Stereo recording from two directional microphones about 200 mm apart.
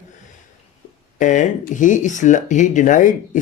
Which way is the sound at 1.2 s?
40° left (ahead or behind).